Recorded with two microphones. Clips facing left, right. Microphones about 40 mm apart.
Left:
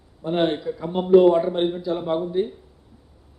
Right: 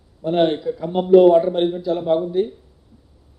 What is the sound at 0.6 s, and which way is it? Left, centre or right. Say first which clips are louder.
A man's voice: right 4 dB; centre.